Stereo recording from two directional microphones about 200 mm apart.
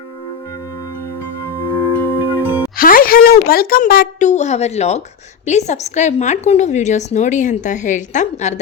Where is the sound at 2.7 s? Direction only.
45° left (ahead or behind).